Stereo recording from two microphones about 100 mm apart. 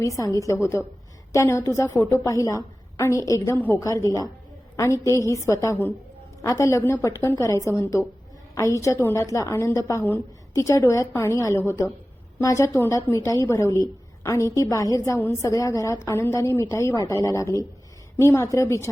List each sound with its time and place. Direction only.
0.0 s a woman's voice: 30° left (ahead or behind)